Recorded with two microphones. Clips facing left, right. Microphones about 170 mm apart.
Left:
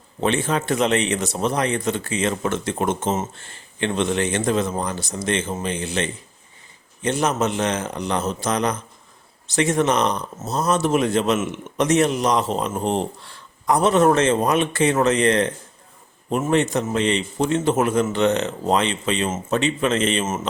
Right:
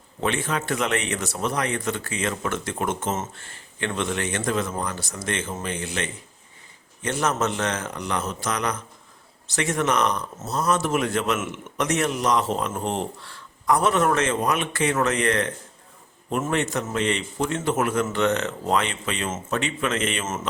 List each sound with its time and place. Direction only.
0.2 s speech: 25° left (ahead or behind)